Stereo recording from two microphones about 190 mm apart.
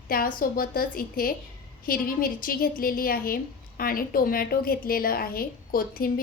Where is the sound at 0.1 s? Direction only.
50° left (ahead or behind).